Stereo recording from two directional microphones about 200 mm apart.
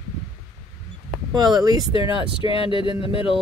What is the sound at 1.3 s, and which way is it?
Speech, 20° right (ahead or behind).